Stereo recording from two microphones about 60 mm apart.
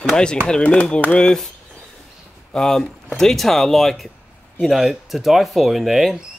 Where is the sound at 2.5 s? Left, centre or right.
Centre.